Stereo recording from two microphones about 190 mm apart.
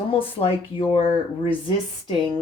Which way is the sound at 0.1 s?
30° left (ahead or behind).